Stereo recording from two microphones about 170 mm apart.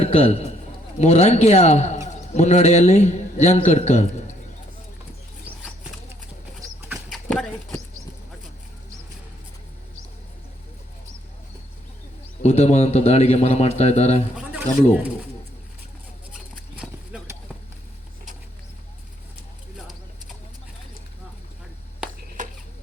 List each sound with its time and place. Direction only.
0.0 s a man's voice: 35° left (ahead or behind)
6.8 s horse: centre (ahead or behind)
12.4 s a man's voice: 40° left (ahead or behind)
22.4 s a sound: 50° right (ahead or behind)